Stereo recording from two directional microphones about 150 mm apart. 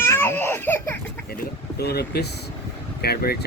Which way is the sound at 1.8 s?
90° left.